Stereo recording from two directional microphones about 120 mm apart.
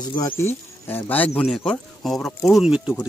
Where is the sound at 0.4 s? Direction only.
20° left (ahead or behind).